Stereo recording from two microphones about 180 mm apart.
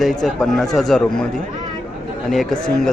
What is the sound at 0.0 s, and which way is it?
Speech, centre (ahead or behind).